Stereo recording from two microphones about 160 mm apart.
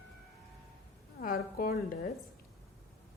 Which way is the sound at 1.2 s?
60° left (ahead or behind).